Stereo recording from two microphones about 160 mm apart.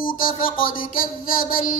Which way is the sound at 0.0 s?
60° left (ahead or behind).